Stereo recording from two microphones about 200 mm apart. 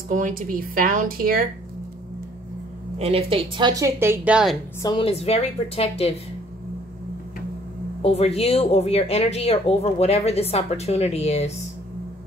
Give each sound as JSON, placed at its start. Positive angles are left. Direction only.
{"t": 0.1, "sound": "speech", "side_deg": -45}
{"t": 3.0, "sound": "a woman's voice", "side_deg": -30}
{"t": 4.8, "sound": "speech", "side_deg": 25}
{"t": 8.0, "sound": "speech", "side_deg": 30}